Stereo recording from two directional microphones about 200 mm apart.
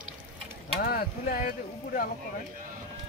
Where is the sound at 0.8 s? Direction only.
50° left (ahead or behind).